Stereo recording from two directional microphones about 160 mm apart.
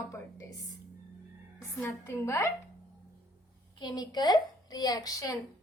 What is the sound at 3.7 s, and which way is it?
A woman's voice, 25° left (ahead or behind).